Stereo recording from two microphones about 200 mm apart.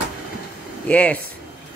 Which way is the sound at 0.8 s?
5° left (ahead or behind).